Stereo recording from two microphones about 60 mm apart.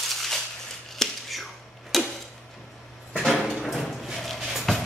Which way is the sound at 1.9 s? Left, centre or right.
Centre.